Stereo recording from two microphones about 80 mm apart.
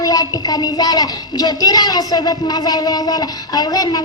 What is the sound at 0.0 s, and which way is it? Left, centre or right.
Speech, left.